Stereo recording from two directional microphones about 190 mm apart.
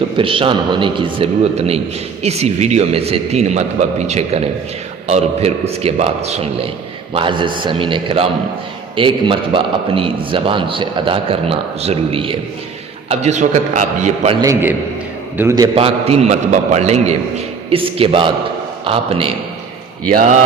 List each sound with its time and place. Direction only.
0.2 s a man's voice: 30° right (ahead or behind)
14.4 s a man's voice: 15° right (ahead or behind)
15.7 s a man's voice: 30° right (ahead or behind)